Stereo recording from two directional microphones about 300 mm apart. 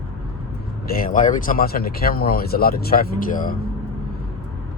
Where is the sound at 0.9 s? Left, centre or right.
Left.